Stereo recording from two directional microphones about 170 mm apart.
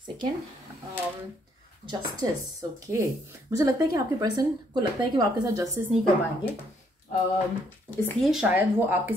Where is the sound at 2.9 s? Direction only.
15° right (ahead or behind).